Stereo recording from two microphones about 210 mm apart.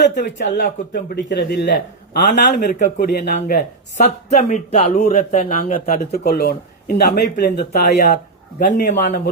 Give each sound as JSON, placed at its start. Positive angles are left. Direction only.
{"t": 0.5, "sound": "a man's voice", "side_deg": 45}
{"t": 3.9, "sound": "a man's voice", "side_deg": 35}
{"t": 6.0, "sound": "a man's voice", "side_deg": 45}